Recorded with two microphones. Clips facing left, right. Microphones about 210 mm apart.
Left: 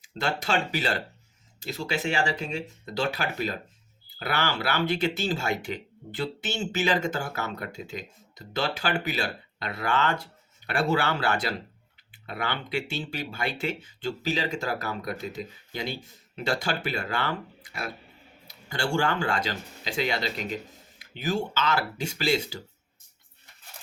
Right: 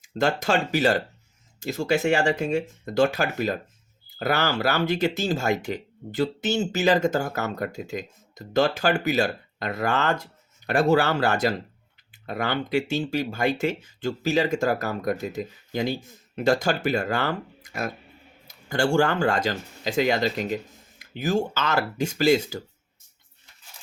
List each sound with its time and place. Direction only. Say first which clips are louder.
0.0 s speech: right 6 dB; 45° right (ahead or behind)